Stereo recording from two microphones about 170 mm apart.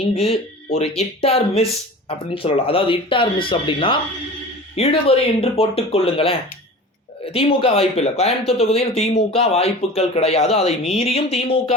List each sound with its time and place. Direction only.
0.1 s speech: 35° left (ahead or behind)